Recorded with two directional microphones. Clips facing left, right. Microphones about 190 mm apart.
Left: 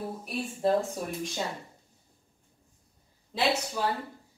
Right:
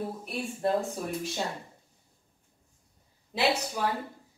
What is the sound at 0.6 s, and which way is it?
Speech, centre (ahead or behind).